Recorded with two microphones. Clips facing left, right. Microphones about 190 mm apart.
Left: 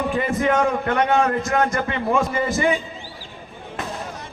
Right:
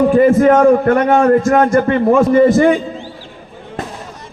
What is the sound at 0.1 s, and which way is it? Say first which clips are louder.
A man's voice: right 11 dB; 45° right (ahead or behind).